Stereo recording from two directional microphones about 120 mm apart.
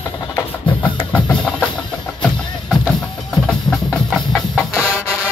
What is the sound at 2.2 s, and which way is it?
Music, 10° left (ahead or behind).